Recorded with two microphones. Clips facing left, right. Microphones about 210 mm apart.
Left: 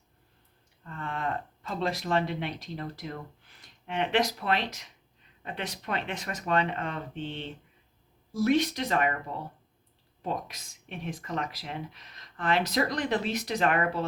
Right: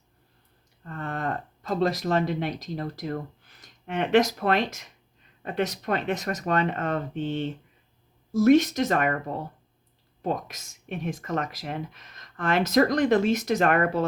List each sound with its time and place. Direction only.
0.9 s speech: 45° right (ahead or behind)